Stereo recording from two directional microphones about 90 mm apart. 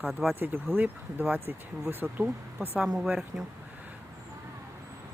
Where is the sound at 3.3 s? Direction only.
35° right (ahead or behind).